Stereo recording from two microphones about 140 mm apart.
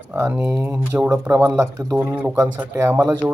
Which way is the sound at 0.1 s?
10° right (ahead or behind).